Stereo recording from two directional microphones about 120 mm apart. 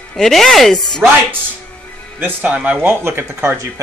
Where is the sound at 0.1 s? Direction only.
5° left (ahead or behind).